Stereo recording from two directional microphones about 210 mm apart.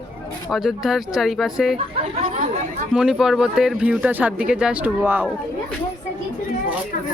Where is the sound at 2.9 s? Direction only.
5° right (ahead or behind).